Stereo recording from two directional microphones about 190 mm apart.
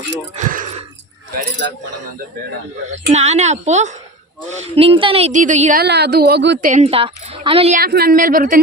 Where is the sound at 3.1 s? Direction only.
35° right (ahead or behind).